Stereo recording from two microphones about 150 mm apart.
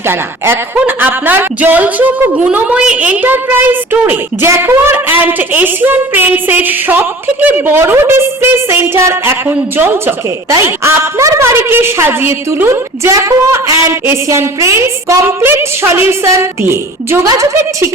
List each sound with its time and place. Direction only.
0.1 s a woman's voice: 15° right (ahead or behind)